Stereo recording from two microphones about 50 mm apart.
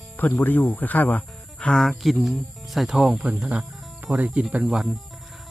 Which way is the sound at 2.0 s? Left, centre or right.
Centre.